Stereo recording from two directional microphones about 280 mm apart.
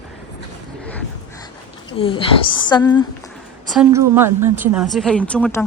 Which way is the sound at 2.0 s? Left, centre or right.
Centre.